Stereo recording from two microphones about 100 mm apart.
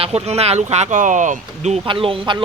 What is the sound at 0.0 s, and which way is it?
Speech, 90° right.